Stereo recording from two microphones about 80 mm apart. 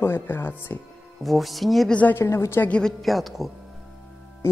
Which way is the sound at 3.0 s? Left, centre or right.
Centre.